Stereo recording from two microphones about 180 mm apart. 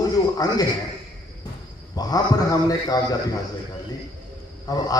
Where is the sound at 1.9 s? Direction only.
20° left (ahead or behind).